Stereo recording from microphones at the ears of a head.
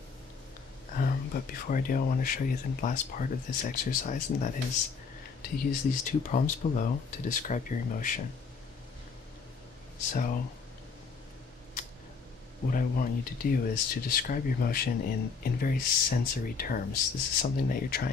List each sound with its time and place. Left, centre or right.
0.8 s speech: left
9.9 s speech: left
12.7 s speech: left